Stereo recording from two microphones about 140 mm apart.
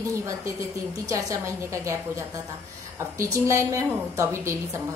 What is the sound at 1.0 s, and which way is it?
A woman's voice, 25° right (ahead or behind).